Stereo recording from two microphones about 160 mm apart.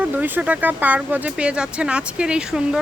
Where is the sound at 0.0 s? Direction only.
10° right (ahead or behind).